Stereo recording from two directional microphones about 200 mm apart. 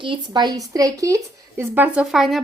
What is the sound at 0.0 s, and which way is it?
Speech, 25° right (ahead or behind).